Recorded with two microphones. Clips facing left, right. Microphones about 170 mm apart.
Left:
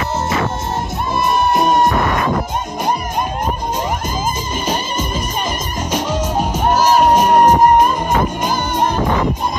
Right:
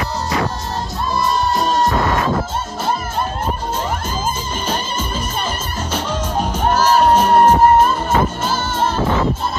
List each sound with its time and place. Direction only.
1.1 s music: 20° left (ahead or behind)
4.6 s music: 10° left (ahead or behind)